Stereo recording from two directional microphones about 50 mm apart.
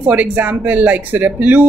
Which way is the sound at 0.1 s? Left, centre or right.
Right.